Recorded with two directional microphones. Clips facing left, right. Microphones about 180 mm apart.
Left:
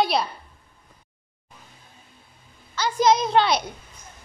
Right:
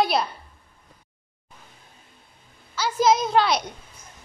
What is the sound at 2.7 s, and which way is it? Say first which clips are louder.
Speech: left 1 dB; 5° right (ahead or behind).